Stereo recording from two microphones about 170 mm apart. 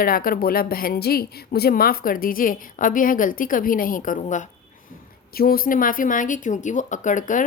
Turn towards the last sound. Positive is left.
turn(degrees=50)  # may be behind; listen again after turning